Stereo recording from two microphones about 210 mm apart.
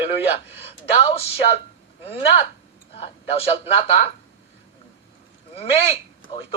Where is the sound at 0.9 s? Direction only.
30° left (ahead or behind).